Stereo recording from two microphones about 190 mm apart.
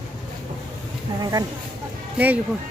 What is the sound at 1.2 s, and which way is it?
Speech, 20° right (ahead or behind).